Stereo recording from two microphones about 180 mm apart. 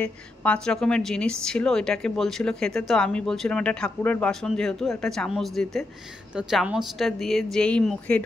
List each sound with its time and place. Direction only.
0.0 s a woman's voice: 5° left (ahead or behind)